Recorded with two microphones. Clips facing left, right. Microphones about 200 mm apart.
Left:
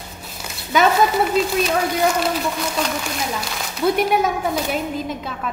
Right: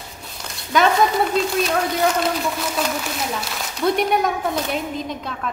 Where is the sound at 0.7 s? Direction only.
5° left (ahead or behind).